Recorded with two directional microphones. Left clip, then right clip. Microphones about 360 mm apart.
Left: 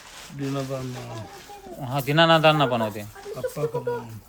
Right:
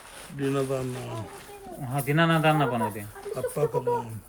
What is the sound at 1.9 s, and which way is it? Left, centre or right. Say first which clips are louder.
Speech: left 6 dB; centre.